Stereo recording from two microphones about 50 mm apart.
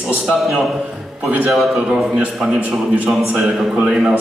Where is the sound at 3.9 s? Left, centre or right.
Right.